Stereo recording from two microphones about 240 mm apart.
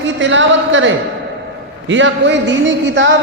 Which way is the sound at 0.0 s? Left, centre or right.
Right.